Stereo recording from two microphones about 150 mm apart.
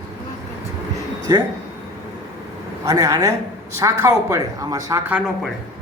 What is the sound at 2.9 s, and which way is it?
Speech, 20° right (ahead or behind).